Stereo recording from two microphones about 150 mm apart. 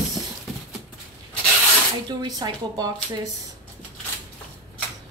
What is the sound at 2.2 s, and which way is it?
A woman's voice, 25° right (ahead or behind).